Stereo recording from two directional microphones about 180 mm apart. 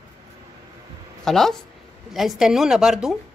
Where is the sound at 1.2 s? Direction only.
Centre (ahead or behind).